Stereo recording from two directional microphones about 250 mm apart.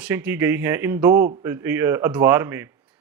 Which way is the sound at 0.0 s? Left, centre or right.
Centre.